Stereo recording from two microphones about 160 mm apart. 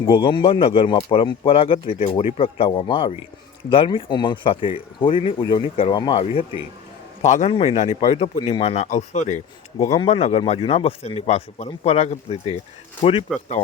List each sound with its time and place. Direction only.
0.0 s speech: 30° left (ahead or behind)